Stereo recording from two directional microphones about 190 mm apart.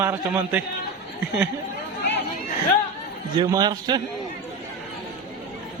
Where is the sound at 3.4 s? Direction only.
20° right (ahead or behind).